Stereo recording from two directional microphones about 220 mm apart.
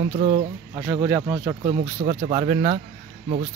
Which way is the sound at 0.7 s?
15° right (ahead or behind).